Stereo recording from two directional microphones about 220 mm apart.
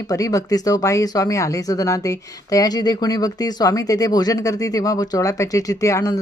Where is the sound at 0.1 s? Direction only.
15° left (ahead or behind).